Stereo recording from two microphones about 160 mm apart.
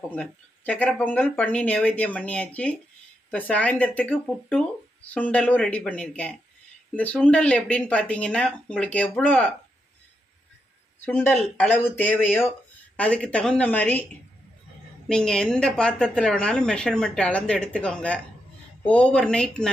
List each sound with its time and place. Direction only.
0.1 s speech: 10° left (ahead or behind)
11.1 s speech: 10° left (ahead or behind)
15.0 s a woman's voice: 5° left (ahead or behind)